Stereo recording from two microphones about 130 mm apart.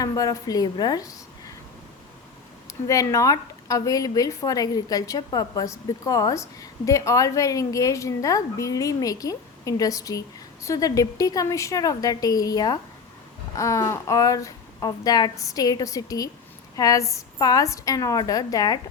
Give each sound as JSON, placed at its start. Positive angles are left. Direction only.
{"t": 0.0, "sound": "a woman's voice", "side_deg": 30}
{"t": 2.6, "sound": "speech", "side_deg": 25}